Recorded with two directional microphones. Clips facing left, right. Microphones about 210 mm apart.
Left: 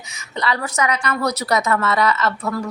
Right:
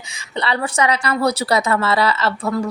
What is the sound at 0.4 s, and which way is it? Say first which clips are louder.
A woman's voice: right 2 dB; 30° right (ahead or behind).